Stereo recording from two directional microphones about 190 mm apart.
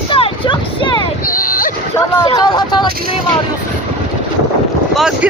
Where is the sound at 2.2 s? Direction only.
20° left (ahead or behind).